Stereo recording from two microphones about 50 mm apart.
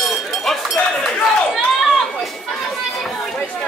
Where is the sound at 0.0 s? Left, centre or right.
Centre.